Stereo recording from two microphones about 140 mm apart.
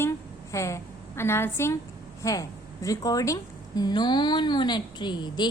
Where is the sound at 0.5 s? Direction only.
20° left (ahead or behind).